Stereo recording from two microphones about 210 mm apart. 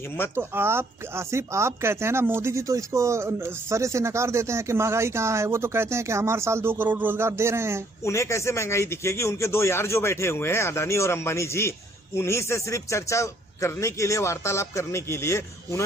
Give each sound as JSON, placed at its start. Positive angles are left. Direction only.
{"t": 0.3, "sound": "speech", "side_deg": -10}
{"t": 8.0, "sound": "speech", "side_deg": 15}